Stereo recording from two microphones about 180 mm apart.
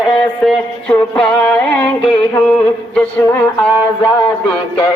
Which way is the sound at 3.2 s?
15° left (ahead or behind).